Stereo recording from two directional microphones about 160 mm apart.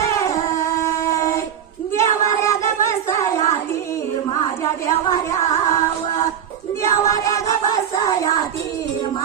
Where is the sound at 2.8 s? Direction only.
20° left (ahead or behind).